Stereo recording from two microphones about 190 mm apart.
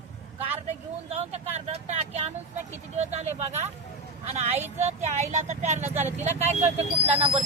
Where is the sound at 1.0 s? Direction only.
35° right (ahead or behind).